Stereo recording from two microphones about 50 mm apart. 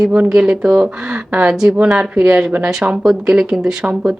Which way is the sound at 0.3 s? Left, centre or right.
Right.